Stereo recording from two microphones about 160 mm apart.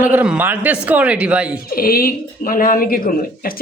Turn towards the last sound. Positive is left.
turn(degrees=65)  # may be behind; listen again after turning